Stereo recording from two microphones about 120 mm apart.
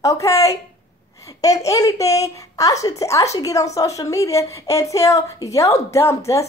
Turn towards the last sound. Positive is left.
turn(degrees=25)  # may be behind; listen again after turning